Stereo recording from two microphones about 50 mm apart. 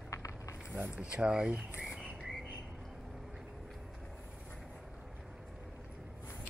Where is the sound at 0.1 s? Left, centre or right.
Left.